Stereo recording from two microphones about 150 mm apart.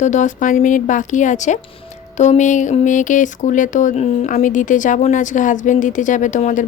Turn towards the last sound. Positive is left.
turn(degrees=55)  # may be behind; listen again after turning